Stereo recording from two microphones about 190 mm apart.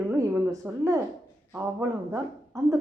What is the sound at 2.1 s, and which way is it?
Speech, 15° right (ahead or behind).